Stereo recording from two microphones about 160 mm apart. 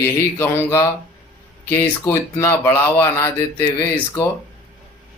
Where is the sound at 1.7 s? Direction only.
15° left (ahead or behind).